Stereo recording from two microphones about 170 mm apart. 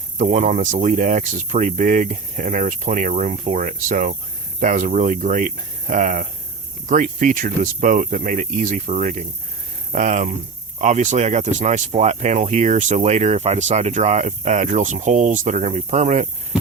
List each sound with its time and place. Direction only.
0.2 s speech: 45° right (ahead or behind)